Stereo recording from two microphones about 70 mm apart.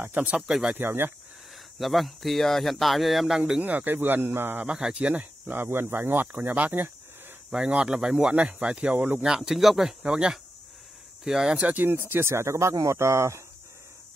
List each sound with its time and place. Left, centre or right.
0.0 s speech: right
0.5 s speech: centre
0.7 s speech: right
1.8 s speech: centre
3.6 s speech: right
4.6 s speech: centre
5.5 s speech: right
7.5 s speech: centre
11.6 s speech: right